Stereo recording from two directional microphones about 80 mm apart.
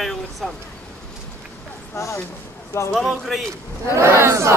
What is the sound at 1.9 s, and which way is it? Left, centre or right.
Speech, left.